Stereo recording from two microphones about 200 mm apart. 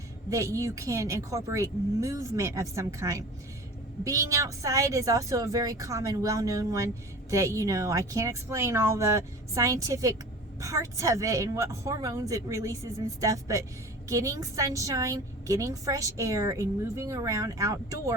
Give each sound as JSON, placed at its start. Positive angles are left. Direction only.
{"t": 0.3, "sound": "a woman's voice", "side_deg": -15}